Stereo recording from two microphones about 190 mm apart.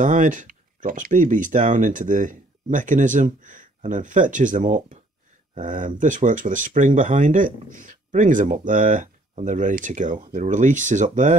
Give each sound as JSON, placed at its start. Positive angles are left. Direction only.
{"t": 0.0, "sound": "speech", "side_deg": -40}